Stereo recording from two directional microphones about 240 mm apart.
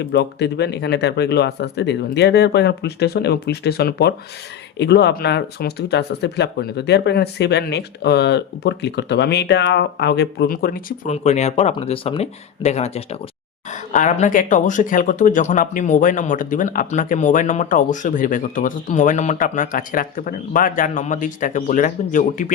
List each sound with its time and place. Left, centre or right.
0.0 s speech: left